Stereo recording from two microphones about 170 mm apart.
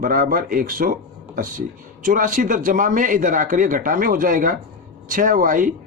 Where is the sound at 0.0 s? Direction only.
55° right (ahead or behind).